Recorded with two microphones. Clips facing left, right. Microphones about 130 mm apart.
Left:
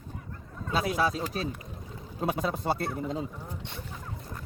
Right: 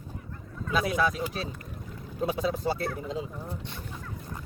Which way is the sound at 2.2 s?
55° left (ahead or behind).